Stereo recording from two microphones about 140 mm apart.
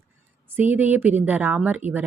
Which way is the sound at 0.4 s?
15° right (ahead or behind).